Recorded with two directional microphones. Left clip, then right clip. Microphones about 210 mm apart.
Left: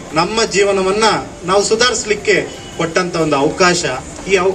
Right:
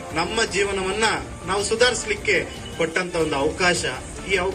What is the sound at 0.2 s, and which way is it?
A man's voice, 50° left (ahead or behind).